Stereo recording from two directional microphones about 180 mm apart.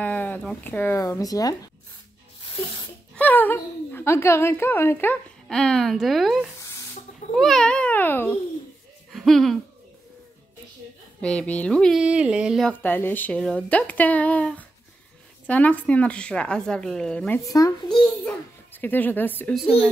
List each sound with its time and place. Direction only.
0.0 s speech: 10° left (ahead or behind)
2.4 s a sound: 25° left (ahead or behind)
3.2 s a woman's voice: 10° left (ahead or behind)
6.6 s a sound: 15° left (ahead or behind)
7.3 s a child's voice: centre (ahead or behind)
9.1 s hoot: centre (ahead or behind)
11.1 s speech: 5° left (ahead or behind)
12.8 s a woman's voice: 10° left (ahead or behind)
17.4 s a woman's voice: 20° left (ahead or behind)